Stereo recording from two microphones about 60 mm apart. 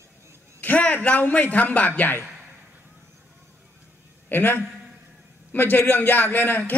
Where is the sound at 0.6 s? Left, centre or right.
Left.